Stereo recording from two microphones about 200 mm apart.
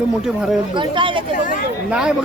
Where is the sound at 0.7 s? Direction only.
25° right (ahead or behind).